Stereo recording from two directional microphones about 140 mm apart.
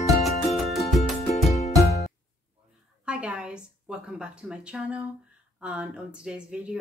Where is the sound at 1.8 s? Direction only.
20° left (ahead or behind).